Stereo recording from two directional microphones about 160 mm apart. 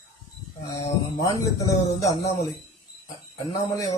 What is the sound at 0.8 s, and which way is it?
Speech, 20° left (ahead or behind).